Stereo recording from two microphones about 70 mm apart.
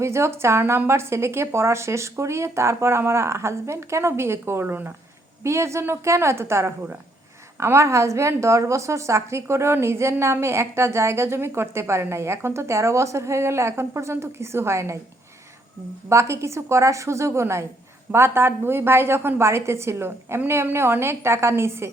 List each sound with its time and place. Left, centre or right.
0.0 s a woman's voice: right
4.6 s speech: right
5.4 s a woman's voice: right
16.0 s a woman's voice: right